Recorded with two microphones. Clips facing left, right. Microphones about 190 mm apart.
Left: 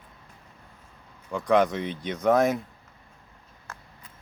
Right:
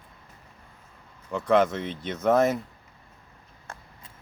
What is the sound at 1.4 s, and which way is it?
Speech, centre (ahead or behind).